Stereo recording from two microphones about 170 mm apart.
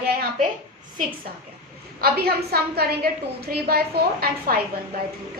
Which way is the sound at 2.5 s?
65° right (ahead or behind).